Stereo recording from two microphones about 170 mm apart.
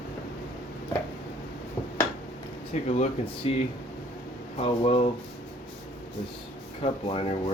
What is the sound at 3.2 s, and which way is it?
Speech, 35° left (ahead or behind).